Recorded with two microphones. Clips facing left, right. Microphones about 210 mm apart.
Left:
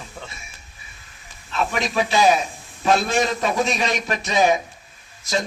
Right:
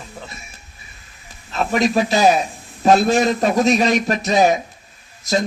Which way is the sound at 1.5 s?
40° right (ahead or behind).